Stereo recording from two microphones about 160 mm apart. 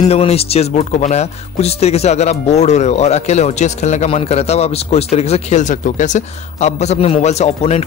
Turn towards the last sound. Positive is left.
turn(degrees=45)  # may be behind; listen again after turning